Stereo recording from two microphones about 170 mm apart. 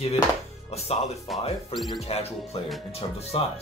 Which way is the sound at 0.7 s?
40° left (ahead or behind).